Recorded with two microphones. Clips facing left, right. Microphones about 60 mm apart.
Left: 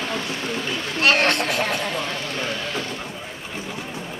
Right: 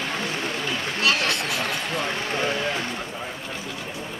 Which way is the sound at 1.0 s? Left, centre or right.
Left.